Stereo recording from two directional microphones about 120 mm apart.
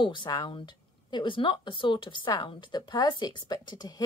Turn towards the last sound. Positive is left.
turn(degrees=35)  # may be behind; listen again after turning